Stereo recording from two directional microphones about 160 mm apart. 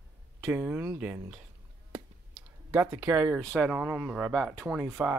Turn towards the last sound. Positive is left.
turn(degrees=-15)  # may be behind; listen again after turning